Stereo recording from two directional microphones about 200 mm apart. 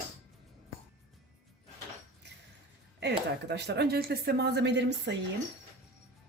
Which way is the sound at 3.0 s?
55° right (ahead or behind).